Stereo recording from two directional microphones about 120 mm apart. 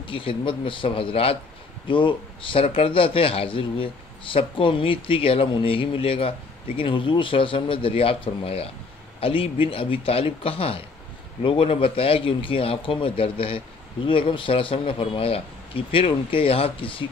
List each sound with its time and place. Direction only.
0.0 s a man's voice: 45° left (ahead or behind)